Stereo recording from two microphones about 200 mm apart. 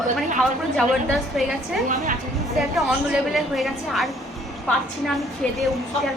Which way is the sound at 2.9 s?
Centre (ahead or behind).